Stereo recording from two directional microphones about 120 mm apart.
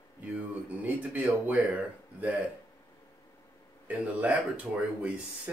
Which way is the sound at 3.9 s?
10° right (ahead or behind).